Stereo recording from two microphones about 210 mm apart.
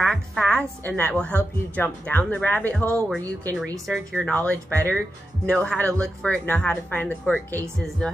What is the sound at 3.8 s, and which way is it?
A woman's voice, centre (ahead or behind).